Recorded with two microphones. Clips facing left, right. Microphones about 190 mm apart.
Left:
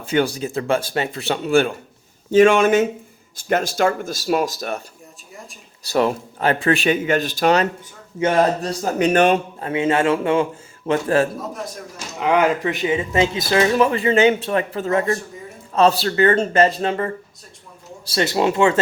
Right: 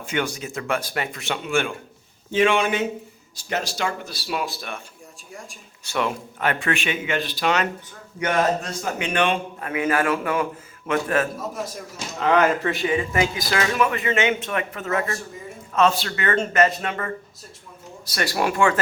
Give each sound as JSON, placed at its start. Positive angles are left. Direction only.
{"t": 0.0, "sound": "speech", "side_deg": 35}
{"t": 5.3, "sound": "a man's voice", "side_deg": 0}
{"t": 5.8, "sound": "speech", "side_deg": 35}
{"t": 9.6, "sound": "a man's voice", "side_deg": 25}
{"t": 11.3, "sound": "a man's voice", "side_deg": 0}
{"t": 12.1, "sound": "a man's voice", "side_deg": 15}